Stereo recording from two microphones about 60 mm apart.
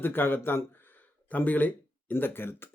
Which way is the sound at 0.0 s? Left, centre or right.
Left.